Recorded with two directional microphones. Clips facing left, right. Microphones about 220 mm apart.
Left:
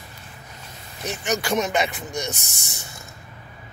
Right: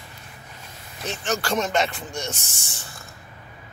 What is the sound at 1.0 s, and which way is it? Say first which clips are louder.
Speech: left 1 dB; 15° left (ahead or behind).